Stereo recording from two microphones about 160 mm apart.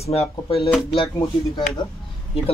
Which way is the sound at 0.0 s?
40° left (ahead or behind).